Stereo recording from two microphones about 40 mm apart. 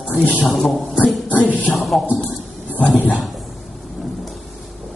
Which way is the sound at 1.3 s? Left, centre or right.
Left.